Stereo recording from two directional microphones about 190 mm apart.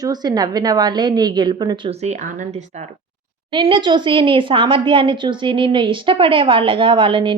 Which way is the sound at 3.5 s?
25° right (ahead or behind).